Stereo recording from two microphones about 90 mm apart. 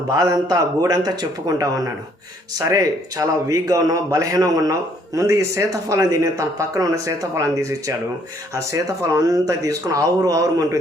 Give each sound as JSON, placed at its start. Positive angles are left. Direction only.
{"t": 0.1, "sound": "a man's voice", "side_deg": -45}